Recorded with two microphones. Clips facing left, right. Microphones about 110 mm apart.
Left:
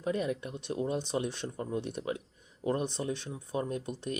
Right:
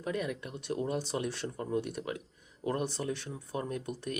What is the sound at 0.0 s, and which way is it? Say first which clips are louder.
Speech: left 3 dB; 25° left (ahead or behind).